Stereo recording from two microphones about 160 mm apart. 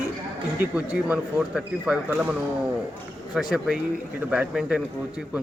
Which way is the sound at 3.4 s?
5° right (ahead or behind).